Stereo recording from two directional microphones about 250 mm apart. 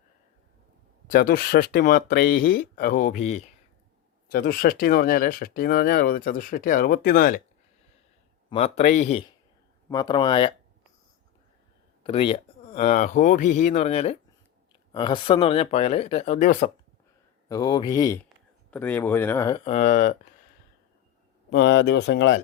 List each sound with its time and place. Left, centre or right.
1.0 s speech: left
8.4 s speech: left
12.0 s speech: left
17.5 s speech: centre
19.6 s speech: left
21.5 s speech: left